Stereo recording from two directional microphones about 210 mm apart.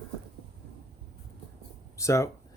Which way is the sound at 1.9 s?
15° left (ahead or behind).